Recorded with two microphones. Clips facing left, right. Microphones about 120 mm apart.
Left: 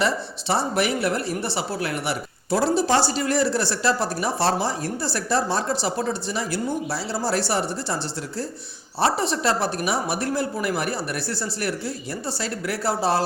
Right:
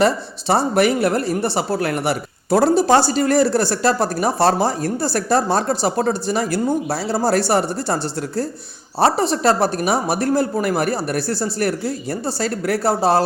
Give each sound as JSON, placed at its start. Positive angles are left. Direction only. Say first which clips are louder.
{"t": 0.0, "sound": "speech", "louder": "right 6 dB", "side_deg": -45}
{"t": 9.0, "sound": "speech", "louder": "right 5 dB", "side_deg": -40}